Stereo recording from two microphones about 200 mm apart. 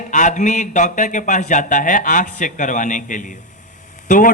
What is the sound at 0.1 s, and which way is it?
A man's voice, 40° left (ahead or behind).